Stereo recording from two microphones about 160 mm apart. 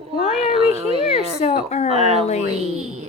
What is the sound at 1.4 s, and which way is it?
Speech, 50° left (ahead or behind).